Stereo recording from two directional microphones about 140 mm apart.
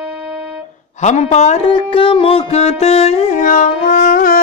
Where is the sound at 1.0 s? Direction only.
60° left (ahead or behind).